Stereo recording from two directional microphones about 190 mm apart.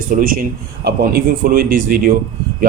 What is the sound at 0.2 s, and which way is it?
Speech, 45° right (ahead or behind).